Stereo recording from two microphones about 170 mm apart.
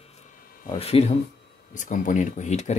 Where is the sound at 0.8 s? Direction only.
35° left (ahead or behind).